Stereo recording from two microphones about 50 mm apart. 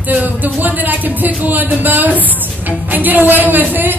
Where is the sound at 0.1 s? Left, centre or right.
Right.